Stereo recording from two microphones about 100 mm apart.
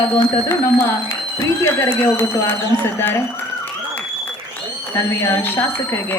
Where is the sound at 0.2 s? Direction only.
25° left (ahead or behind).